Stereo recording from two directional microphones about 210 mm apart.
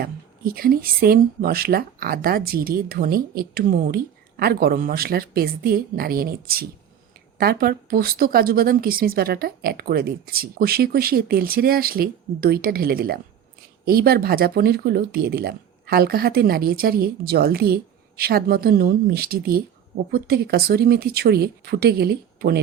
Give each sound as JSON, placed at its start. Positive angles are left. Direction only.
{"t": 0.0, "sound": "speech", "side_deg": -45}